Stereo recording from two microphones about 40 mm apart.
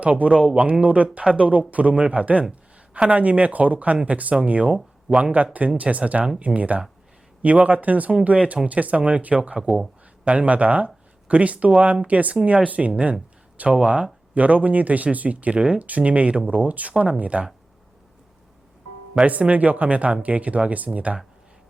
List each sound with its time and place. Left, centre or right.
0.0 s speech: right
5.1 s speech: centre
5.5 s speech: right
9.6 s speech: centre
10.2 s speech: right
19.2 s speech: right